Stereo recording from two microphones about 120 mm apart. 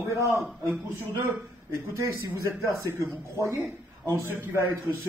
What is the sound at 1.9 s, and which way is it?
Speech, 25° right (ahead or behind).